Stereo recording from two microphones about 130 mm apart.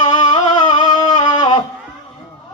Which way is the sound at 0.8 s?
35° left (ahead or behind).